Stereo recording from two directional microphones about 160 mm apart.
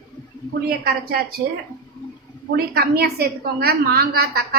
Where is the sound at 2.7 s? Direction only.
80° right.